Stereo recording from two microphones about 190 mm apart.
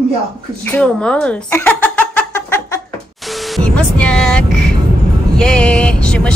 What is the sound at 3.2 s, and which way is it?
Music, centre (ahead or behind).